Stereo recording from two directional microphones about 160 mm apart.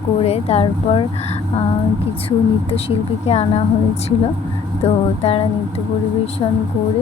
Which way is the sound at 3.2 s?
40° left (ahead or behind).